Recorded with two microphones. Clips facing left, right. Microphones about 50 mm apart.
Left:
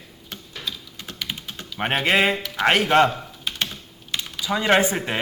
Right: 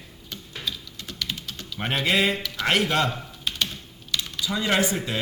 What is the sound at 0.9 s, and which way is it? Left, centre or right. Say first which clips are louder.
Typing: left 1 dB; left.